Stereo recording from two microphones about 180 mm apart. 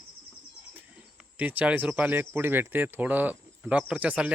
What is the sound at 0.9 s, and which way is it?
Speech, 10° right (ahead or behind).